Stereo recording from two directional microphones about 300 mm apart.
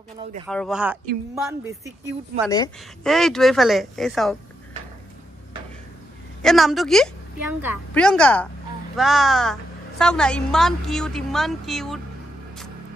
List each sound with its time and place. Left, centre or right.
0.5 s a woman's voice: centre
2.5 s speech: centre
3.1 s a woman's voice: centre
6.4 s a woman's voice: centre